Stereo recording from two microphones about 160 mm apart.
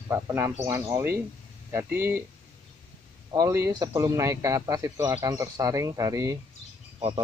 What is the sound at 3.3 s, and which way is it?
A man's voice, 20° right (ahead or behind).